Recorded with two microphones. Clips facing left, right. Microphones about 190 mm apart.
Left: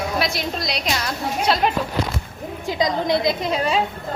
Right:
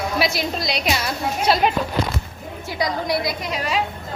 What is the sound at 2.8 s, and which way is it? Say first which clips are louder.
A woman's voice: left 3 dB; 20° left (ahead or behind).